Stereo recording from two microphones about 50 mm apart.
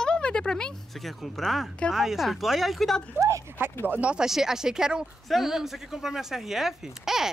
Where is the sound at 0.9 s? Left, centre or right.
Centre.